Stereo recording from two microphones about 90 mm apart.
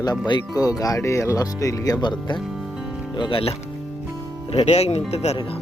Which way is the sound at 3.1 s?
70° left (ahead or behind).